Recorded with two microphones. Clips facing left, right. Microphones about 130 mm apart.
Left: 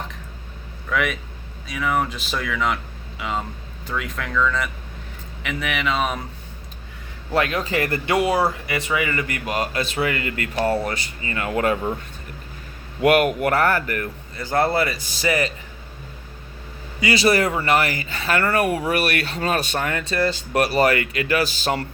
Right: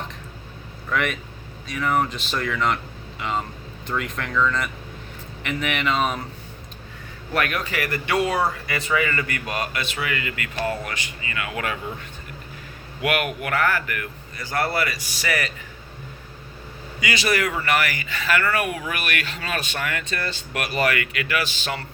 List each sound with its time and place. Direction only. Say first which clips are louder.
0.9 s a sound: left 1 dB; 5° left (ahead or behind)
1.6 s speech: even; 5° left (ahead or behind)
7.3 s speech: left 4 dB; 25° left (ahead or behind)
13.0 s speech: left 8 dB; 40° left (ahead or behind)
17.0 s speech: left 5 dB; 30° left (ahead or behind)